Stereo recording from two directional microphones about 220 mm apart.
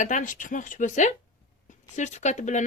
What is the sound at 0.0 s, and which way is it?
Speech, 35° left (ahead or behind).